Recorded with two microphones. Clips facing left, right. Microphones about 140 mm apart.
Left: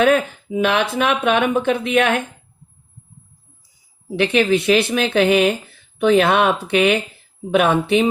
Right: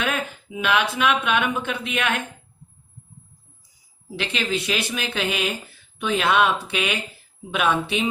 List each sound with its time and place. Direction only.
0.0 s speech: 50° left (ahead or behind)
4.1 s speech: 55° left (ahead or behind)